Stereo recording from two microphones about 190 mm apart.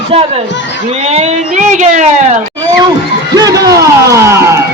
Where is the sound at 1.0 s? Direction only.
35° right (ahead or behind).